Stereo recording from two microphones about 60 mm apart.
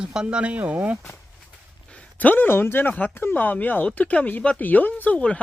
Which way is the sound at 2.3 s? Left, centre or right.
Left.